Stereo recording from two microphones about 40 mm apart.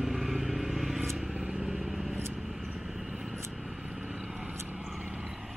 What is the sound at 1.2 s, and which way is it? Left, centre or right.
Vehicle, right.